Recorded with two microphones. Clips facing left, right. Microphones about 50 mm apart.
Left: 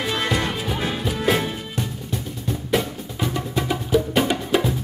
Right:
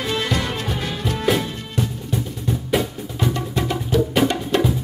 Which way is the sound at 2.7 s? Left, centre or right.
Centre.